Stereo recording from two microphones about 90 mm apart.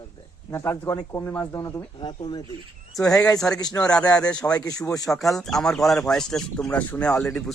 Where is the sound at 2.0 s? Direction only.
55° left (ahead or behind).